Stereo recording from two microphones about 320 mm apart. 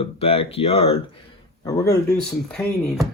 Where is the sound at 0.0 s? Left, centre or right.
Centre.